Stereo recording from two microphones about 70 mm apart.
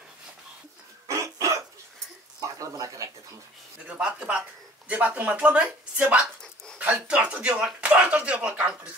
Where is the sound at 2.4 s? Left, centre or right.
Right.